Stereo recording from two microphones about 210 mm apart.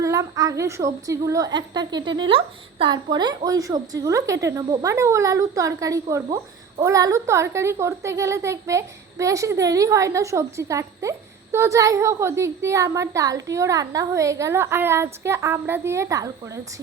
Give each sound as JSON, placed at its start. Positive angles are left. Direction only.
{"t": 0.0, "sound": "a woman's voice", "side_deg": -15}